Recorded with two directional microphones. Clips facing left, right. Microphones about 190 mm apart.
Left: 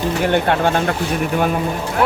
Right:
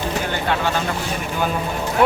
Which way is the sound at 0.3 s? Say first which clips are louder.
Left 9 dB; 60° left (ahead or behind).